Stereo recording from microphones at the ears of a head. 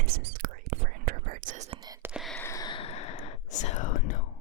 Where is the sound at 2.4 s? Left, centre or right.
Left.